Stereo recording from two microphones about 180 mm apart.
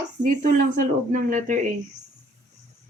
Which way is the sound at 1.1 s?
45° right (ahead or behind).